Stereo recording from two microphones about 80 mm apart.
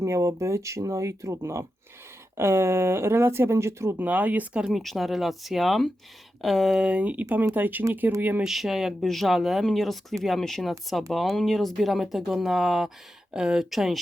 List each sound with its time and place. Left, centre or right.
0.0 s speech: right
3.9 s speech: centre
4.7 s speech: centre
6.8 s speech: centre
8.4 s speech: centre